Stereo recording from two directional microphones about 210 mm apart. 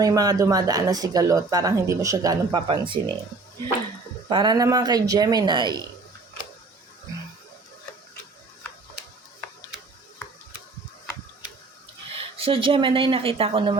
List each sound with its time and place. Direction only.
0.0 s speech: 15° right (ahead or behind)
4.3 s speech: 20° right (ahead or behind)
12.1 s speech: 25° right (ahead or behind)